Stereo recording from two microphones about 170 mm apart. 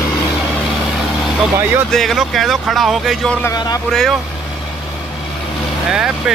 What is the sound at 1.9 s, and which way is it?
Speech, centre (ahead or behind).